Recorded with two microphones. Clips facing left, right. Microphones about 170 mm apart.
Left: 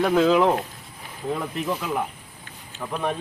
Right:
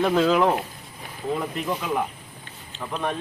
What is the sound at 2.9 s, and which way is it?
Speech, 10° left (ahead or behind).